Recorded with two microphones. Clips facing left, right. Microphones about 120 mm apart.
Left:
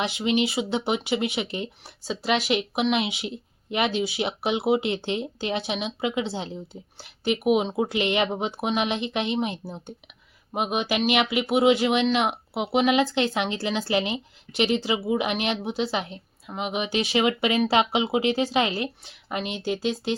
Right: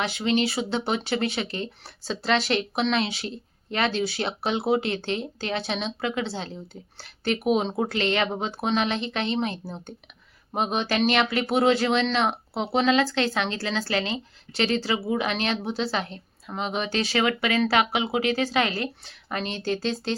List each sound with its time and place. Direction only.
0.0 s speech: 20° left (ahead or behind)